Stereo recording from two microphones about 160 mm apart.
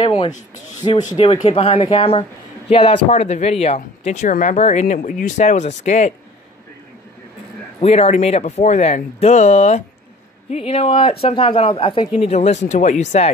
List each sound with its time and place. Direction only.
0.0 s speech: 30° left (ahead or behind)
7.8 s speech: 40° left (ahead or behind)
12.2 s speech: 40° left (ahead or behind)